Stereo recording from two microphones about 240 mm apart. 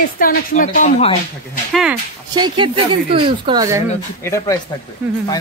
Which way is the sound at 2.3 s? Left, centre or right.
Centre.